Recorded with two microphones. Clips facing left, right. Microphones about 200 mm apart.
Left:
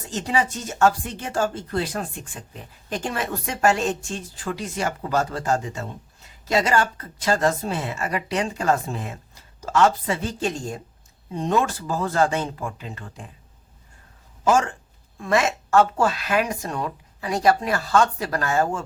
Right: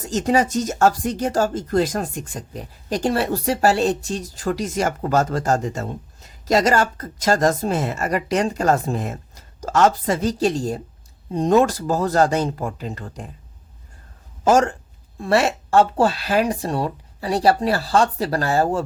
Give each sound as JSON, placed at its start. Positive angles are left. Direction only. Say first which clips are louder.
{"t": 0.1, "sound": "speech", "louder": "right 6 dB", "side_deg": -40}
{"t": 14.4, "sound": "speech", "louder": "right 4 dB", "side_deg": -40}